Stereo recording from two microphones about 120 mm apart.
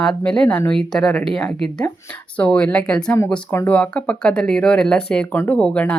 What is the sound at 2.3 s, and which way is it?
Speech, 10° left (ahead or behind).